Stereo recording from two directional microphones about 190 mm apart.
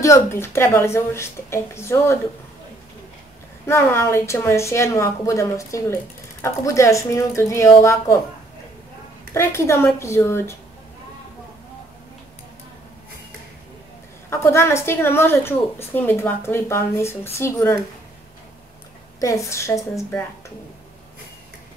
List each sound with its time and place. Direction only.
0.0 s a woman's voice: 15° left (ahead or behind)
3.6 s a woman's voice: 15° left (ahead or behind)
9.3 s a woman's voice: 15° left (ahead or behind)
14.3 s a woman's voice: 15° left (ahead or behind)
19.1 s a woman's voice: 15° left (ahead or behind)